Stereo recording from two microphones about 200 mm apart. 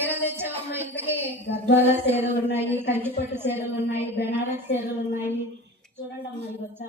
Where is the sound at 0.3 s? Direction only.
10° right (ahead or behind).